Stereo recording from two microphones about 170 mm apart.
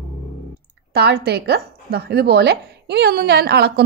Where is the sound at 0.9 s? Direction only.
70° right (ahead or behind).